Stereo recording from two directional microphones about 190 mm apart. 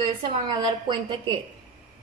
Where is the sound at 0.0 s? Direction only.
25° right (ahead or behind).